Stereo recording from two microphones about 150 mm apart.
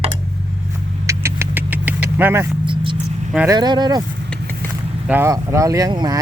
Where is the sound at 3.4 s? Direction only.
25° right (ahead or behind).